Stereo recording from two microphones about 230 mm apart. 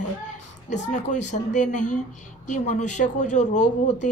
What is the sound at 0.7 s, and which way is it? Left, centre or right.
Speech, left.